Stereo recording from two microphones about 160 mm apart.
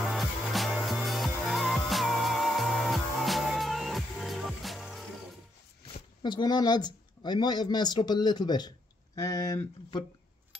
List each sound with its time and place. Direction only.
0.0 s music: centre (ahead or behind)
5.9 s speech: 30° left (ahead or behind)